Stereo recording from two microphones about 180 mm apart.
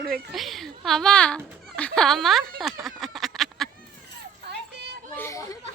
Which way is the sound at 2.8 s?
Centre (ahead or behind).